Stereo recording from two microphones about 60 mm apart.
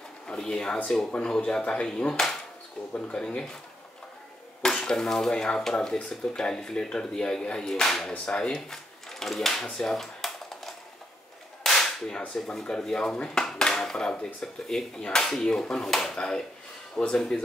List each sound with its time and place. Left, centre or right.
0.3 s speech: centre
4.6 s speech: centre
11.6 s whip: centre
12.8 s speech: centre